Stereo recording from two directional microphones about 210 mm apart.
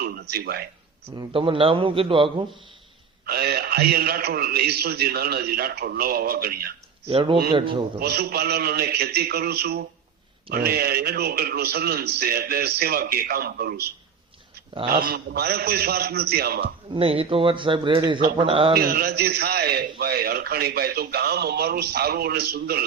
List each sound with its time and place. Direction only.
0.0 s a sound: 50° right (ahead or behind)
1.1 s a man's voice: 20° right (ahead or behind)
3.2 s a man's voice: 50° right (ahead or behind)
7.1 s a man's voice: 25° right (ahead or behind)
7.9 s a man's voice: 50° right (ahead or behind)
16.9 s a man's voice: 25° right (ahead or behind)
18.7 s a man's voice: 45° right (ahead or behind)